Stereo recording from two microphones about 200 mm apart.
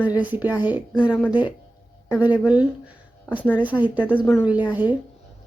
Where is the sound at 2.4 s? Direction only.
5° right (ahead or behind).